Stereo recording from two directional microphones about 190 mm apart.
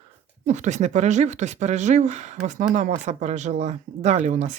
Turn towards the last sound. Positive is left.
turn(degrees=-40)  # may be behind; listen again after turning